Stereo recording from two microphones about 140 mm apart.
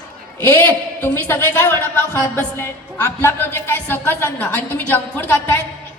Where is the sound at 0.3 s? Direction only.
15° left (ahead or behind).